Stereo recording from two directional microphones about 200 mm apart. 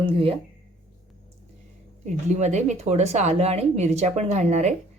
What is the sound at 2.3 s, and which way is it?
Speech, 35° right (ahead or behind).